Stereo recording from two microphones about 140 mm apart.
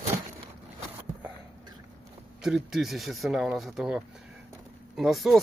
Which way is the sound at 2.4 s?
Centre (ahead or behind).